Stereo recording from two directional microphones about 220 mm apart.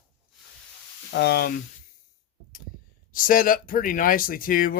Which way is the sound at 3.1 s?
40° left (ahead or behind).